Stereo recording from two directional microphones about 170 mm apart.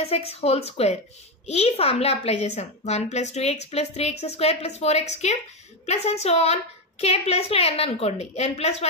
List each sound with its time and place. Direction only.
0.0 s a woman's voice: 35° left (ahead or behind)